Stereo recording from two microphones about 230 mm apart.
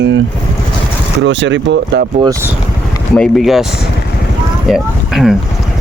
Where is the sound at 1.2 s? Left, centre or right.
Right.